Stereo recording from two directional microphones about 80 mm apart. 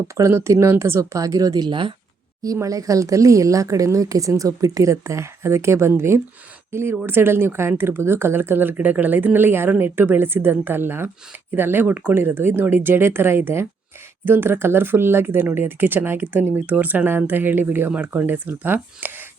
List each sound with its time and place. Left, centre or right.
0.1 s speech: right
2.4 s speech: right